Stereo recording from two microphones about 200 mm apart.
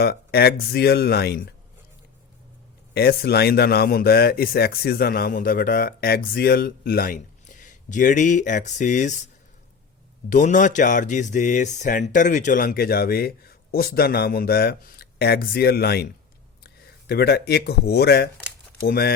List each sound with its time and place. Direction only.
0.0 s a man's voice: 55° left (ahead or behind)
2.9 s a man's voice: 50° left (ahead or behind)
10.2 s a man's voice: 40° left (ahead or behind)